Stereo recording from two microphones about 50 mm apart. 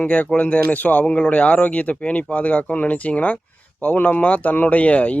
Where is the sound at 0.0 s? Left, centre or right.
Left.